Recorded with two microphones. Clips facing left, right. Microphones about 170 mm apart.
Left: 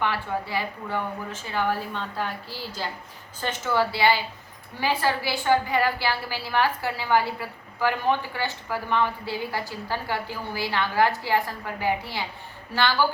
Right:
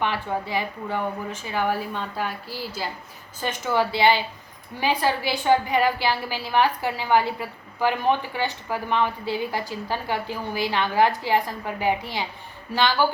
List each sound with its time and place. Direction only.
0.0 s a woman's voice: 20° right (ahead or behind)